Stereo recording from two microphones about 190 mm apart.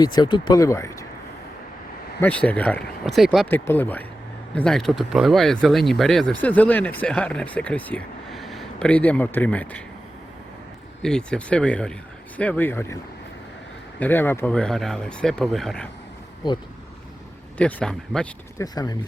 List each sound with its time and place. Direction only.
0.0 s speech: 20° left (ahead or behind)
2.2 s speech: 10° left (ahead or behind)
11.0 s speech: 5° left (ahead or behind)
14.0 s speech: 10° left (ahead or behind)
17.6 s speech: 5° left (ahead or behind)
18.5 s speech: 20° left (ahead or behind)